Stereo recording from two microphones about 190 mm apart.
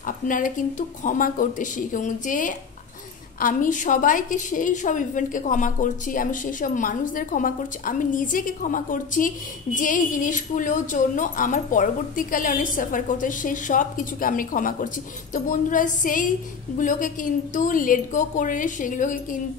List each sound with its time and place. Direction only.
0.0 s a woman's voice: 45° left (ahead or behind)